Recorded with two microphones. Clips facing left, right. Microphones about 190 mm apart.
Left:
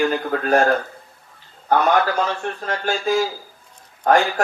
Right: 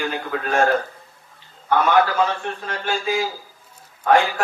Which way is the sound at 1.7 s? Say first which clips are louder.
Even; 45° left (ahead or behind).